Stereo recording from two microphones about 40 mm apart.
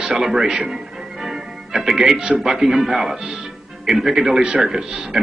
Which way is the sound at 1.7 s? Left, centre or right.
Centre.